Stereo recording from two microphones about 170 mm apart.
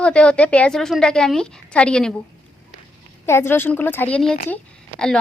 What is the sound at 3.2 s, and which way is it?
A woman's voice, 15° left (ahead or behind).